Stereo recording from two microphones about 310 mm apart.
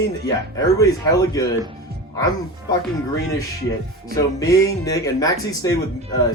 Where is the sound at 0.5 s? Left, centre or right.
Centre.